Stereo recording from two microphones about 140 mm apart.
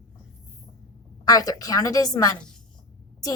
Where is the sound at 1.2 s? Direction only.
25° left (ahead or behind).